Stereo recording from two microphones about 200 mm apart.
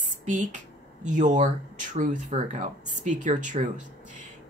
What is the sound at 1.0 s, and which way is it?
Speech, 40° right (ahead or behind).